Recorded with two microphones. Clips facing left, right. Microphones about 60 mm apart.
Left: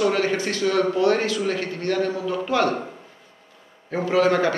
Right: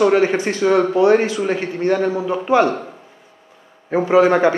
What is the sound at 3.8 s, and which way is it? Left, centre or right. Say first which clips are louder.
Speech: right 6 dB; right.